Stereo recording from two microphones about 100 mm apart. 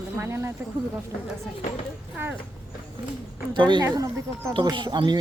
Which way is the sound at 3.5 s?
50° right (ahead or behind).